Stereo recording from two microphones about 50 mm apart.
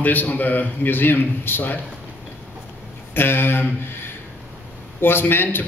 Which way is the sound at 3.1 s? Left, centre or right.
Left.